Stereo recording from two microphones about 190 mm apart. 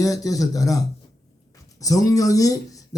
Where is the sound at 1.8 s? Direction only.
15° left (ahead or behind).